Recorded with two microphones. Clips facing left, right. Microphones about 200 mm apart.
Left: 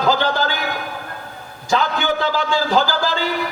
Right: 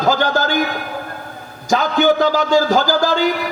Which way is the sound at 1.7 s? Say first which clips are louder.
Right 5 dB; 45° right (ahead or behind).